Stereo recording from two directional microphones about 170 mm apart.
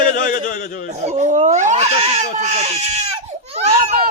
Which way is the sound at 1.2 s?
45° right (ahead or behind).